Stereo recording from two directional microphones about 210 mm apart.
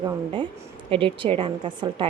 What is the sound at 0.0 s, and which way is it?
Speech, 20° right (ahead or behind).